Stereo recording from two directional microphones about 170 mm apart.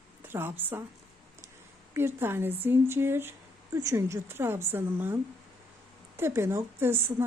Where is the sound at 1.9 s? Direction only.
15° right (ahead or behind).